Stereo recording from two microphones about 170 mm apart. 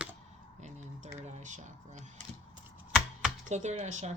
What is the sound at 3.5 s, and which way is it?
Speech, 45° right (ahead or behind).